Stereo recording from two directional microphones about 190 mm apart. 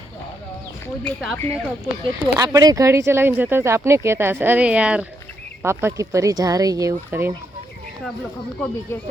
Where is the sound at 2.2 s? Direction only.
15° right (ahead or behind).